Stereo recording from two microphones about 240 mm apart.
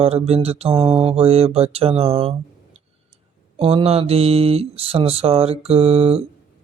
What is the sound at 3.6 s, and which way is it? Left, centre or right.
Mantra, right.